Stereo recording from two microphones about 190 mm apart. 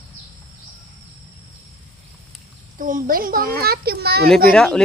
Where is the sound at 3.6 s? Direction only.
55° right (ahead or behind).